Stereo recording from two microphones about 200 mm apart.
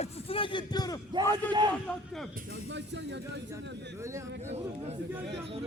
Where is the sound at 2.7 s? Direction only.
60° right (ahead or behind).